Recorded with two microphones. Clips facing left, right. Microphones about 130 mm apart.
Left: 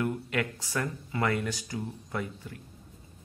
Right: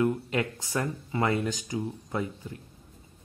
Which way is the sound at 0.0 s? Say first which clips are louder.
Right 4 dB; 25° right (ahead or behind).